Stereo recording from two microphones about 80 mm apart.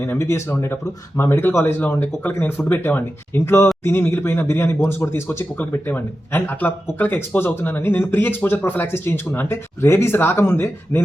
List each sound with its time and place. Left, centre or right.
0.0 s speech: left